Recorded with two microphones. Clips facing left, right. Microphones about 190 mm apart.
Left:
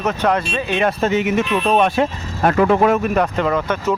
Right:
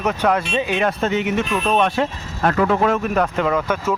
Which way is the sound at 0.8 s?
5° left (ahead or behind).